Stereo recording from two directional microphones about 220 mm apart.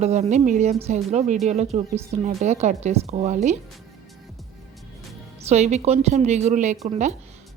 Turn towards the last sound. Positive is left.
turn(degrees=-30)  # may be behind; listen again after turning